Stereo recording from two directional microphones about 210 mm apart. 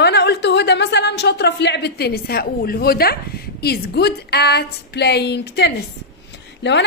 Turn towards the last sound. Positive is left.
turn(degrees=55)  # may be behind; listen again after turning